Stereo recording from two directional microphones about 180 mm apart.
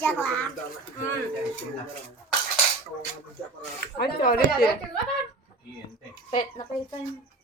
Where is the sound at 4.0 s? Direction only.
55° left (ahead or behind).